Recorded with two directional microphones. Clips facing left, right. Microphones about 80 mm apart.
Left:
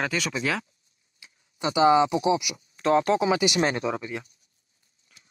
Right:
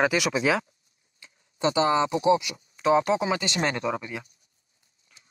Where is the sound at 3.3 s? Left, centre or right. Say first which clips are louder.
Left 4 dB; centre.